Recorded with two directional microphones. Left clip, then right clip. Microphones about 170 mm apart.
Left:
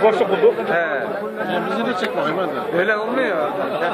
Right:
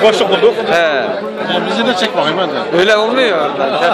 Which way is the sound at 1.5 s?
20° right (ahead or behind).